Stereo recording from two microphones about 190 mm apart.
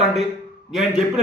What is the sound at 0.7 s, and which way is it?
Speech, centre (ahead or behind).